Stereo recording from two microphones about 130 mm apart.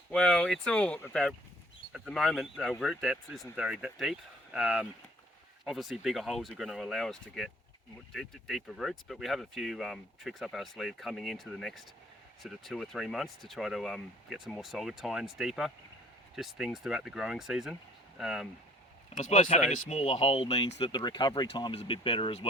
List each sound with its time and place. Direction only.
0.1 s speech: 5° left (ahead or behind)
19.2 s speech: 65° left (ahead or behind); by 22.4 s 50° left (ahead or behind)